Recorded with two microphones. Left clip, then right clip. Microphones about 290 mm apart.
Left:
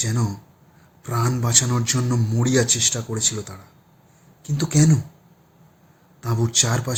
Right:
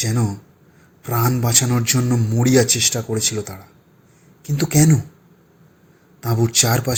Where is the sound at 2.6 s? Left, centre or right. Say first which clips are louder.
Right 3 dB; left.